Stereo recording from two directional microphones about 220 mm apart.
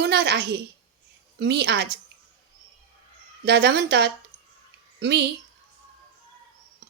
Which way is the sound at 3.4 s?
50° right (ahead or behind).